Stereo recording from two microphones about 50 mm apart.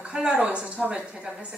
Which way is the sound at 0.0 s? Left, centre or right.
Centre.